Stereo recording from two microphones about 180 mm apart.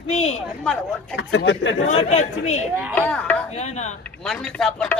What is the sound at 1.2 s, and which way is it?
Speech, 80° left.